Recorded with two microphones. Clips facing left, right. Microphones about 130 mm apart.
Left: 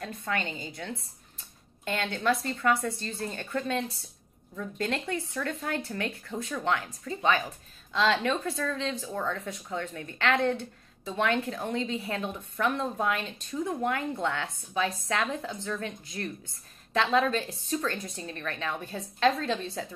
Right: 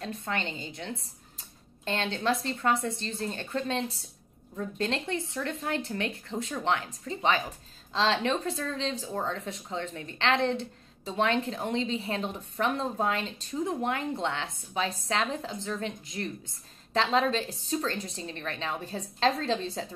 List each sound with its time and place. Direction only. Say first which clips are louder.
0.0 s speech: left 1 dB; 25° right (ahead or behind)